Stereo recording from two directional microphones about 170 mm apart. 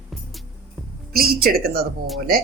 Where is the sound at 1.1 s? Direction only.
65° right (ahead or behind).